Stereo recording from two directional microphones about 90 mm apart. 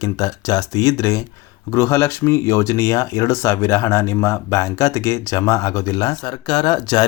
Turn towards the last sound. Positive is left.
turn(degrees=50)  # may be behind; listen again after turning